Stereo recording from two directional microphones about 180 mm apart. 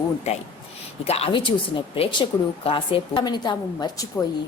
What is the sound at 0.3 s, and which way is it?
A woman's voice, 35° left (ahead or behind).